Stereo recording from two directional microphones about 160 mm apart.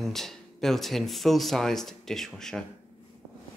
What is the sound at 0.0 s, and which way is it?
Speech, centre (ahead or behind).